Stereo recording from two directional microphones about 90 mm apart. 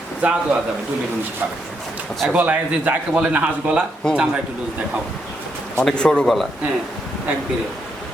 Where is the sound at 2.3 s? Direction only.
20° right (ahead or behind).